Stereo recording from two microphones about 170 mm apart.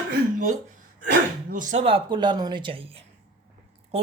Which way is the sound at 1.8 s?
30° right (ahead or behind).